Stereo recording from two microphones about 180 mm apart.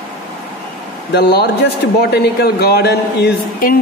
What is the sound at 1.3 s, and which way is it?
Speech, 65° left (ahead or behind).